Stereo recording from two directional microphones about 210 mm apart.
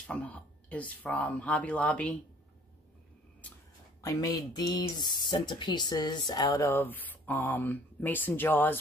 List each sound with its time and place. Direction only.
0.0 s speech: 5° left (ahead or behind)
4.0 s speech: 15° left (ahead or behind)